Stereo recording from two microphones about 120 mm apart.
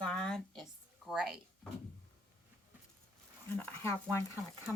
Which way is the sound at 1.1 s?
5° right (ahead or behind).